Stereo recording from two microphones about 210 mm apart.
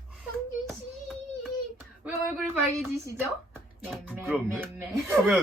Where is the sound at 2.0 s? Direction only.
10° right (ahead or behind).